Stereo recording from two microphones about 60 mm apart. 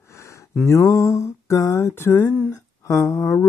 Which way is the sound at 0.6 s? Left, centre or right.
Left.